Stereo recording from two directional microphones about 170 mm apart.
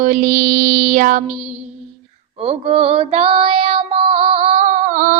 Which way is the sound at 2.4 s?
35° right (ahead or behind).